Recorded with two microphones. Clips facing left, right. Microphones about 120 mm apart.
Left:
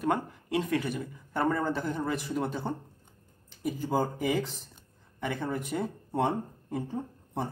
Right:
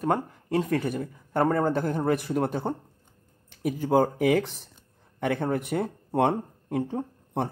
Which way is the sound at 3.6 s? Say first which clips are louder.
Right 6 dB; 65° right (ahead or behind).